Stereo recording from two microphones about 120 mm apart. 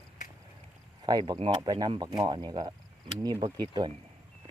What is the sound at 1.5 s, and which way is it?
Speech, 35° right (ahead or behind).